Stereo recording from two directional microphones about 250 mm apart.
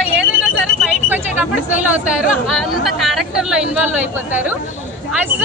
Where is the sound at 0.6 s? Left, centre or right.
Centre.